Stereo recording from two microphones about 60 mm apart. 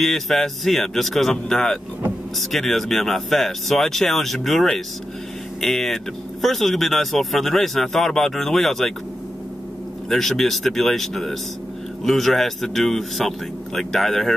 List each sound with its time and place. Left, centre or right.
0.0 s speech: centre
10.0 s speech: centre